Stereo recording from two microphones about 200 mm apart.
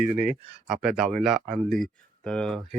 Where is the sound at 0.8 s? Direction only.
Centre (ahead or behind).